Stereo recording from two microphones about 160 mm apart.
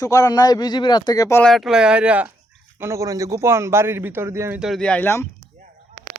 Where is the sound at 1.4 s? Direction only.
Centre (ahead or behind); by 4.6 s 15° right (ahead or behind).